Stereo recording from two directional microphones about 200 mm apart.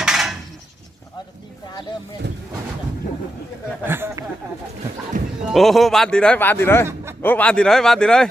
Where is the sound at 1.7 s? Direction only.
20° left (ahead or behind).